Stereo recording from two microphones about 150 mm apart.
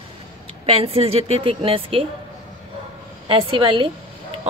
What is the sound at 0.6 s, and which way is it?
Speech, 40° right (ahead or behind).